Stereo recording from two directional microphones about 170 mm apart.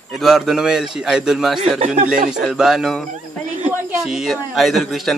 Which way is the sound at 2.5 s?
Centre (ahead or behind).